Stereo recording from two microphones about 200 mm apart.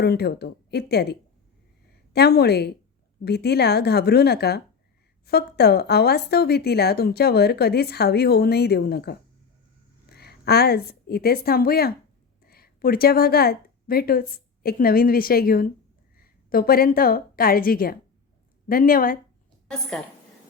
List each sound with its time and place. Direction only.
0.0 s a woman's voice: 55° left (ahead or behind)